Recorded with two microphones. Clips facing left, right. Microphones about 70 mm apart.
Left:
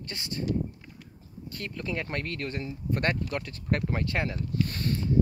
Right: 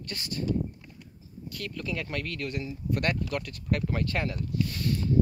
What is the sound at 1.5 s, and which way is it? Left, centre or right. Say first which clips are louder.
Speech: left 1 dB; left.